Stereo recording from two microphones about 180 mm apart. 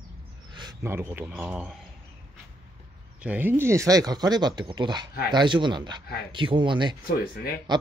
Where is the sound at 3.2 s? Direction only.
10° right (ahead or behind).